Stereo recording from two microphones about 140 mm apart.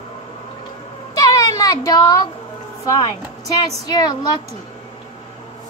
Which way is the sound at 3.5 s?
30° left (ahead or behind).